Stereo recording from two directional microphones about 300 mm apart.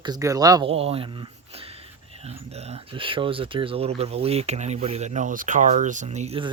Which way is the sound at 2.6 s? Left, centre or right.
Right.